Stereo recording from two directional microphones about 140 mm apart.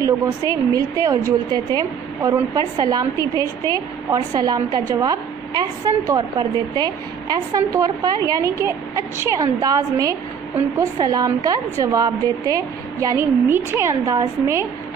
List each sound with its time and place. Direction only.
0.0 s a woman's voice: 25° right (ahead or behind)